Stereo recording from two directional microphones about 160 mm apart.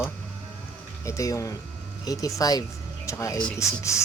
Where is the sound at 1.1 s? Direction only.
20° left (ahead or behind).